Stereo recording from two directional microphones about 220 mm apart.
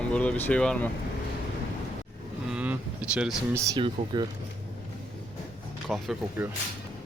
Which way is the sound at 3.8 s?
20° right (ahead or behind).